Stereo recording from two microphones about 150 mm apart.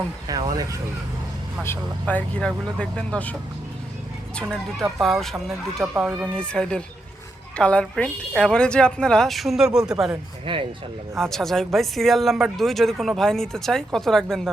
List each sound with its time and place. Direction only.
0.3 s speech: 25° right (ahead or behind)
1.6 s speech: 15° left (ahead or behind)
4.9 s speech: centre (ahead or behind)
6.3 s speech: 5° left (ahead or behind)
10.4 s speech: 35° right (ahead or behind)
11.2 s speech: 5° left (ahead or behind)